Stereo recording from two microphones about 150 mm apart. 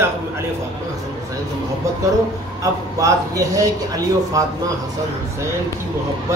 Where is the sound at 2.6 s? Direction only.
20° right (ahead or behind).